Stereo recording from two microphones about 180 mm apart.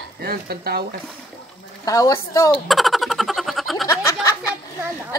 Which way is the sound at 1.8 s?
20° left (ahead or behind).